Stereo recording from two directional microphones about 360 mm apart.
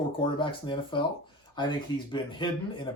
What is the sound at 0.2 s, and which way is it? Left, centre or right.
Speech, centre.